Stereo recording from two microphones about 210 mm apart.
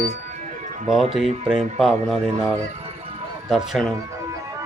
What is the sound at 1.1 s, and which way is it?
Speech, centre (ahead or behind).